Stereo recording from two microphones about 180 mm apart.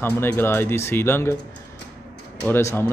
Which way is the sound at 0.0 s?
10° left (ahead or behind).